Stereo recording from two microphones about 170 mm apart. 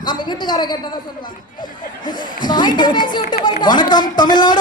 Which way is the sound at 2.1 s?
25° left (ahead or behind).